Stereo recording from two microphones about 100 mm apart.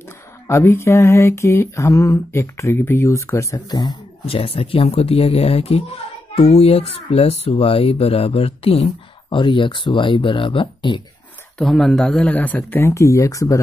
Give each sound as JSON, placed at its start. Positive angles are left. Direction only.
{"t": 0.5, "sound": "mantra", "side_deg": 30}
{"t": 3.7, "sound": "speech", "side_deg": 45}
{"t": 4.3, "sound": "speech", "side_deg": 70}
{"t": 9.4, "sound": "speech", "side_deg": 55}
{"t": 11.5, "sound": "speech", "side_deg": 5}
{"t": 12.4, "sound": "mantra", "side_deg": 15}